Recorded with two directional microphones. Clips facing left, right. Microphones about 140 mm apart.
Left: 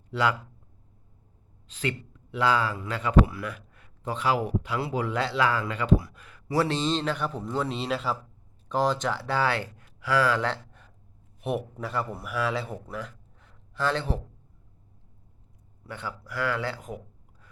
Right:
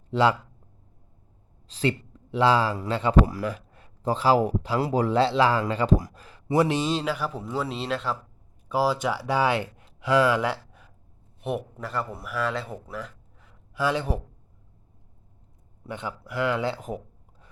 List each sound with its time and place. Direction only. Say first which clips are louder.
0.1 s speech: right 5 dB; 25° right (ahead or behind)
1.6 s speech: right 5 dB; 35° right (ahead or behind)
6.5 s speech: right 3 dB; 15° right (ahead or behind)
15.9 s speech: right 3 dB; 20° right (ahead or behind)